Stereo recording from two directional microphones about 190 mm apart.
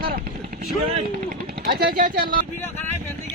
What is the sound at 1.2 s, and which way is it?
Speech, 50° right (ahead or behind).